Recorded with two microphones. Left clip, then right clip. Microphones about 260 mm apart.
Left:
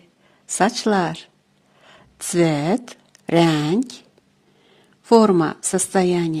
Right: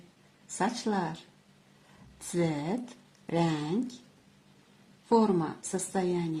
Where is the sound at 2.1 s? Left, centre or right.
Left.